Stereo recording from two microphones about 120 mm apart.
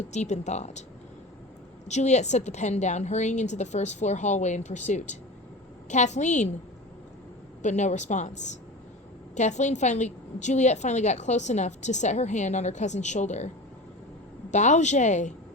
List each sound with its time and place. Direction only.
0.1 s a woman's voice: 75° left (ahead or behind)
1.9 s a woman's voice: 70° left (ahead or behind)
7.6 s a woman's voice: 80° left
14.5 s a woman's voice: 80° left